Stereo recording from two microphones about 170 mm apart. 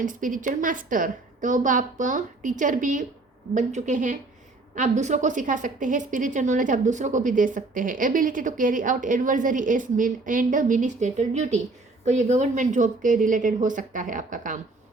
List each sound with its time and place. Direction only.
0.0 s a woman's voice: 50° right (ahead or behind)